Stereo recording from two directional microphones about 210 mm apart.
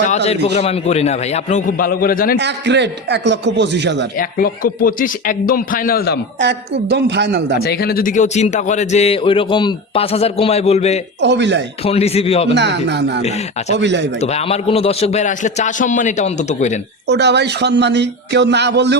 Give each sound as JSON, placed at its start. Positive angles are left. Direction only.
{"t": 0.0, "sound": "a man's voice", "side_deg": 35}
{"t": 2.4, "sound": "a man's voice", "side_deg": -55}
{"t": 4.2, "sound": "a man's voice", "side_deg": 40}
{"t": 6.4, "sound": "a man's voice", "side_deg": -55}
{"t": 7.6, "sound": "a man's voice", "side_deg": 50}
{"t": 11.2, "sound": "a man's voice", "side_deg": -55}
{"t": 11.9, "sound": "speech", "side_deg": 30}
{"t": 12.5, "sound": "a man's voice", "side_deg": -55}
{"t": 14.2, "sound": "a man's voice", "side_deg": 30}
{"t": 17.1, "sound": "a man's voice", "side_deg": -55}